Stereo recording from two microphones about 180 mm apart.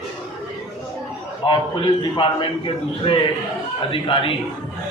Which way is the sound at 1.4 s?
30° left (ahead or behind).